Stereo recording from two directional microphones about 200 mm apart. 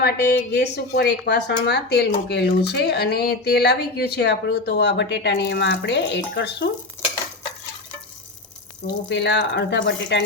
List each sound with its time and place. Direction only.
0.0 s speech: 55° left (ahead or behind)
9.0 s speech: 60° left (ahead or behind)